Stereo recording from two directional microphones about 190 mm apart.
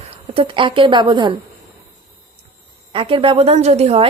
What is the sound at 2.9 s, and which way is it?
Speech, 30° right (ahead or behind).